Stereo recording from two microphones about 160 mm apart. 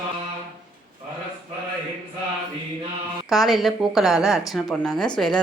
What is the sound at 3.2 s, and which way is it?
A woman's voice, centre (ahead or behind).